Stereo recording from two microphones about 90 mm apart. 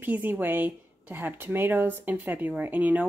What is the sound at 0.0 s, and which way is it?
Speech, 20° right (ahead or behind).